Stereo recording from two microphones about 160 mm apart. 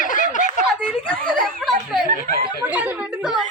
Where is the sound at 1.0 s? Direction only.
5° left (ahead or behind).